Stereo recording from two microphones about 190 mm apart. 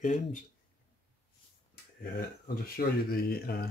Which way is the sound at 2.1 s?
50° left (ahead or behind).